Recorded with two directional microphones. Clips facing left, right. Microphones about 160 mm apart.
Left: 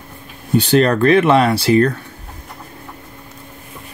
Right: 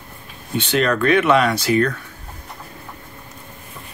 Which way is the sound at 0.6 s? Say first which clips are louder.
Left 6 dB; 35° left (ahead or behind).